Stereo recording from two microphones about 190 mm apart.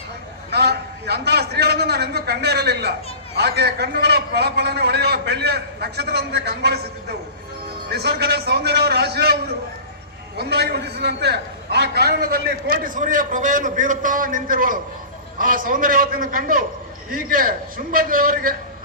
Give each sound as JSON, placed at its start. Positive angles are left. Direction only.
{"t": 0.5, "sound": "a man's voice", "side_deg": -60}
{"t": 7.9, "sound": "a man's voice", "side_deg": -60}